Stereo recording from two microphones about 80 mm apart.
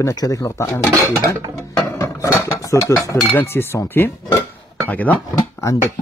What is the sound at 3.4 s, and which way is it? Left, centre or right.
Speech, left.